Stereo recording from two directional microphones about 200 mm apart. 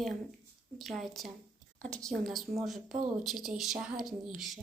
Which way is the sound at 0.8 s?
Centre (ahead or behind).